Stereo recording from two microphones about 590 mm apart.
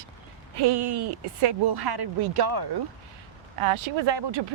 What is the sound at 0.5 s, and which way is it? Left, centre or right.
Speech, right.